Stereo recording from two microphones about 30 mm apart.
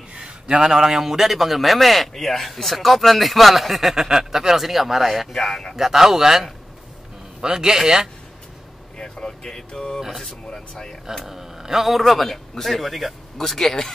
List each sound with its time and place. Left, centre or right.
0.7 s a man's voice: centre
3.9 s speech: centre
5.3 s a man's voice: centre
5.8 s a man's voice: centre
8.9 s a sound: left
9.7 s speech: left
9.9 s a man's voice: centre
11.2 s a man's voice: centre
12.0 s a man's voice: centre
13.5 s a man's voice: centre